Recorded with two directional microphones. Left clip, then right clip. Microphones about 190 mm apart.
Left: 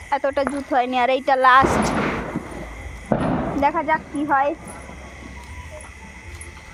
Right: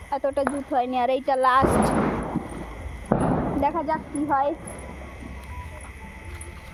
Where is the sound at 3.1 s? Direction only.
50° right (ahead or behind).